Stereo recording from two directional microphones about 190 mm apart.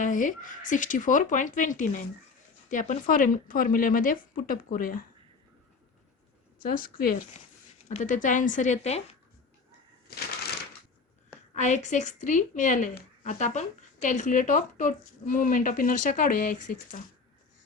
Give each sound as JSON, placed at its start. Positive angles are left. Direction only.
{"t": 0.0, "sound": "a woman's voice", "side_deg": 45}
{"t": 6.6, "sound": "a woman's voice", "side_deg": 50}
{"t": 11.5, "sound": "a woman's voice", "side_deg": 40}